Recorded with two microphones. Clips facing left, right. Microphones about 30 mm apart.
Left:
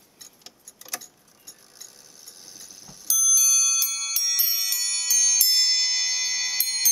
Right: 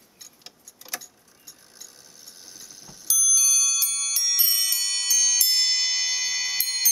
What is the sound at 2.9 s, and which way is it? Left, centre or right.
Alarm clock, centre.